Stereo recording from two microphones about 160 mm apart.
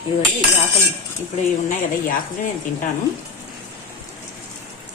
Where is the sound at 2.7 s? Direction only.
50° left (ahead or behind).